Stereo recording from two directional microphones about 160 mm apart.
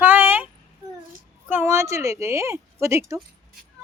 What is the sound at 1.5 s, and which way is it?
Speech, 15° right (ahead or behind).